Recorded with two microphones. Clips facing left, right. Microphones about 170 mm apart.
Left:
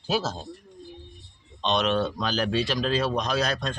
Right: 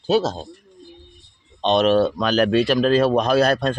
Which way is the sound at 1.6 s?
40° right (ahead or behind).